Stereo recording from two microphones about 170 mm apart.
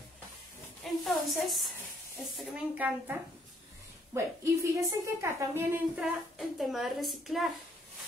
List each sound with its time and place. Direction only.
1.0 s a woman's voice: centre (ahead or behind)
5.9 s a woman's voice: centre (ahead or behind)